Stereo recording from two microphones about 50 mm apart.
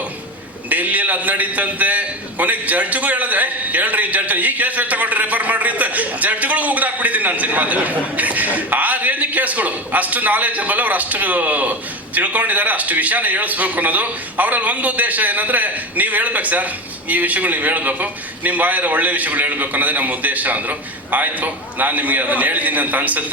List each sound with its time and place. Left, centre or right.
0.7 s a man's voice: right